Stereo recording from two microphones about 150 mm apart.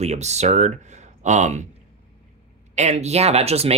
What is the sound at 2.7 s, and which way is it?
Speech, 50° right (ahead or behind).